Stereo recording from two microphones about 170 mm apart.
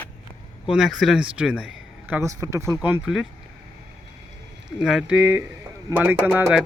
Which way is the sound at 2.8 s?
5° right (ahead or behind).